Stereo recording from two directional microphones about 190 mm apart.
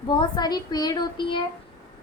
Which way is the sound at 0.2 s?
20° left (ahead or behind).